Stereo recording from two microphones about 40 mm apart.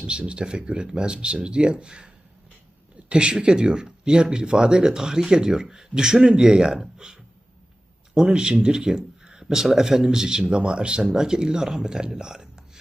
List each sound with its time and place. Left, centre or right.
0.1 s speech: right
3.1 s speech: right